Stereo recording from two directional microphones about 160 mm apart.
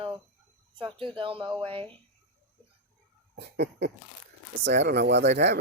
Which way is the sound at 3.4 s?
90° right.